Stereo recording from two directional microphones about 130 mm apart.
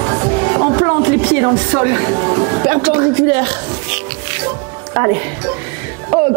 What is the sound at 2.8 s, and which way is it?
Speech, 20° right (ahead or behind).